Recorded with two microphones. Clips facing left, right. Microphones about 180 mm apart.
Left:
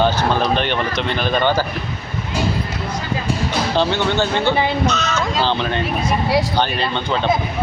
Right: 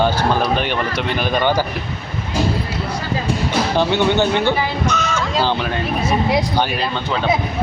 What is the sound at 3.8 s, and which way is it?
Speech, 15° right (ahead or behind).